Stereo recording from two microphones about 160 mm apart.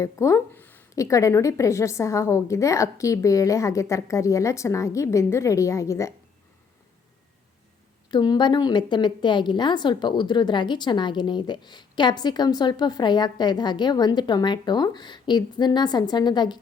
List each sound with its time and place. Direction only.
0.0 s a woman's voice: 20° left (ahead or behind)
8.1 s a woman's voice: 30° left (ahead or behind)